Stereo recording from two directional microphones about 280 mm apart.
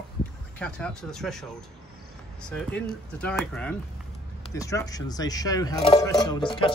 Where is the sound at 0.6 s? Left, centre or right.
Centre.